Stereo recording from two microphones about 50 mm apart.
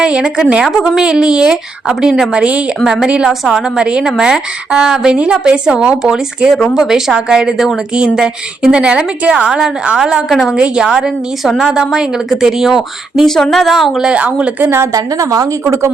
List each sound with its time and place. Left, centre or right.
0.0 s a woman's voice: centre
2.8 s a woman's voice: centre
10.0 s a woman's voice: centre
10.6 s a woman's voice: centre
10.9 s a woman's voice: centre
13.2 s speech: centre
14.0 s a woman's voice: right
14.6 s a woman's voice: right